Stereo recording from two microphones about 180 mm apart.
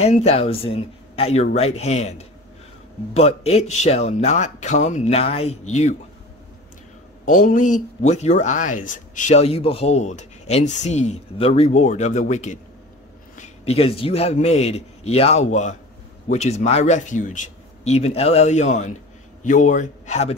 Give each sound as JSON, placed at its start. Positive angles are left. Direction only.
{"t": 0.0, "sound": "speech", "side_deg": 35}
{"t": 7.2, "sound": "a man's voice", "side_deg": 45}